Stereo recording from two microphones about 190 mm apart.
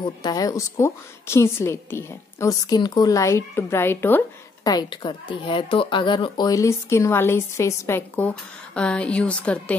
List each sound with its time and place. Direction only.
0.2 s speech: 20° left (ahead or behind)
4.6 s speech: 20° left (ahead or behind); by 9.8 s 5° left (ahead or behind)